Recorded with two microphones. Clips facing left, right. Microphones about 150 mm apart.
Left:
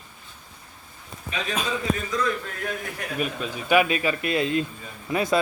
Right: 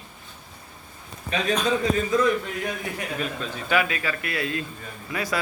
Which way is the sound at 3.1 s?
10° left (ahead or behind).